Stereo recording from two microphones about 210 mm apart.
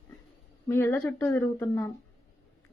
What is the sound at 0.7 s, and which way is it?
Speech, 10° left (ahead or behind).